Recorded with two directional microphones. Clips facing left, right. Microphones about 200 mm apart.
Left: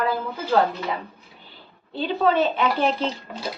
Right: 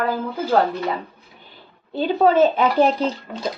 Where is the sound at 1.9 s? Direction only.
45° right (ahead or behind).